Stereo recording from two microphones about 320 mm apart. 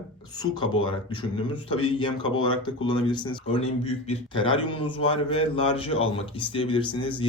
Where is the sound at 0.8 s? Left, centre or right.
Centre.